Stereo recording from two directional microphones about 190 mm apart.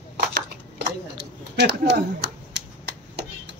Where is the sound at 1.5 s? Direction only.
65° right (ahead or behind).